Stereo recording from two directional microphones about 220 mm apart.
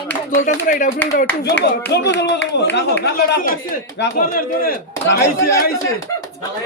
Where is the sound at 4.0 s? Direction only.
40° left (ahead or behind).